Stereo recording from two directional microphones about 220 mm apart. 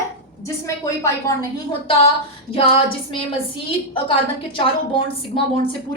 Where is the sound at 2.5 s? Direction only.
25° left (ahead or behind).